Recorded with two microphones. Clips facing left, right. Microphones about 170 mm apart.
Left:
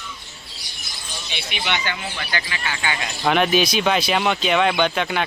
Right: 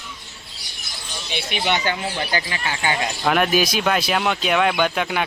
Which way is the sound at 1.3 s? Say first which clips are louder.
Right 4 dB; 45° right (ahead or behind).